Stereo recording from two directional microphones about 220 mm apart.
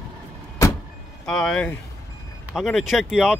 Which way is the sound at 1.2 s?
5° left (ahead or behind).